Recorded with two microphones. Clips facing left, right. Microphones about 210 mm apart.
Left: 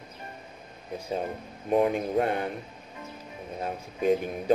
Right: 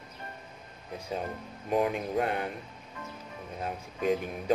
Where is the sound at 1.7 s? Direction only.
30° left (ahead or behind).